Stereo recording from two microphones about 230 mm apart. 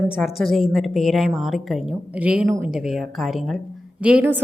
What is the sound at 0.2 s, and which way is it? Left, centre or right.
A woman's voice, centre.